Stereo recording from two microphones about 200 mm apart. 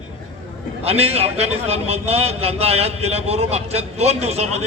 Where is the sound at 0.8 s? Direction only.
30° right (ahead or behind).